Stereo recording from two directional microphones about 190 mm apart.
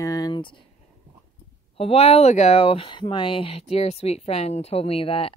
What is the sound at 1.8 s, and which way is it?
Speech, 30° left (ahead or behind).